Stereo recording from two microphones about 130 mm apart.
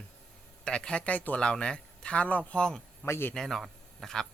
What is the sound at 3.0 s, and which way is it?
Speech, 20° left (ahead or behind).